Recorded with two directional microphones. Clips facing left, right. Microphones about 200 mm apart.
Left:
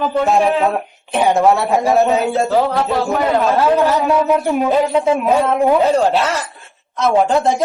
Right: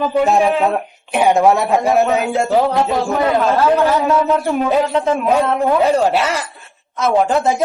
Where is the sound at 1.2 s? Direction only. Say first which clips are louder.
Right 1 dB; 15° right (ahead or behind).